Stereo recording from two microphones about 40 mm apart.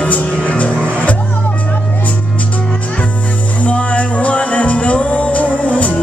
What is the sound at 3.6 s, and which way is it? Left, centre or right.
Music, left.